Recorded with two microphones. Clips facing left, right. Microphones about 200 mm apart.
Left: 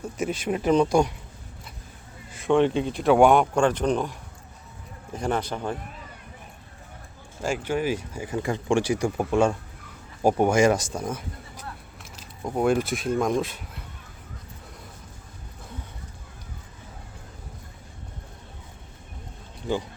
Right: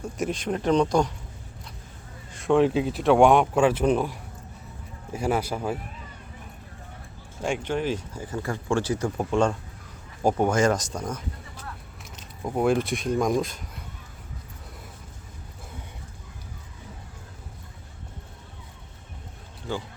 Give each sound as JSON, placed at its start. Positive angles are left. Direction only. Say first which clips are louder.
{"t": 0.0, "sound": "speech", "louder": "even", "side_deg": 5}
{"t": 2.3, "sound": "speech", "louder": "even", "side_deg": 0}
{"t": 5.1, "sound": "speech", "louder": "right 1 dB", "side_deg": -10}
{"t": 7.4, "sound": "speech", "louder": "left 1 dB", "side_deg": 5}
{"t": 12.4, "sound": "speech", "louder": "even", "side_deg": 0}
{"t": 19.7, "sound": "speech", "louder": "left 4 dB", "side_deg": 15}